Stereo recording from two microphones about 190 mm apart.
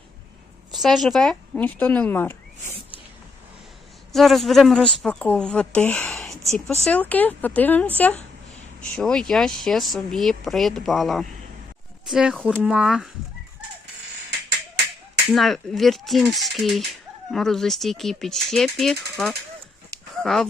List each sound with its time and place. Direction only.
0.8 s speech: centre (ahead or behind)
4.1 s speech: centre (ahead or behind)
15.3 s speech: centre (ahead or behind)